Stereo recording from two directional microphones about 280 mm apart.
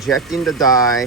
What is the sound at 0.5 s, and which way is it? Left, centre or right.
Speech, centre.